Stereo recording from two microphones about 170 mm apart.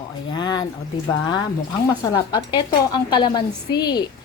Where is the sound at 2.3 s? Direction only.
25° left (ahead or behind).